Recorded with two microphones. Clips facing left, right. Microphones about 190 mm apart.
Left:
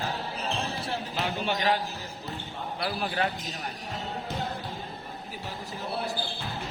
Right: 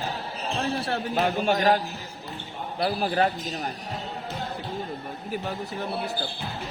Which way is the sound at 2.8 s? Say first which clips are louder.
Right 6 dB; 35° right (ahead or behind).